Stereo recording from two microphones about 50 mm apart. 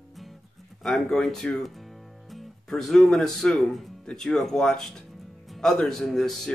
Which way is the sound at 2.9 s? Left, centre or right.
Centre.